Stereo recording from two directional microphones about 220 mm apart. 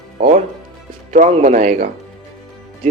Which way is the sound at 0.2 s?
35° right (ahead or behind).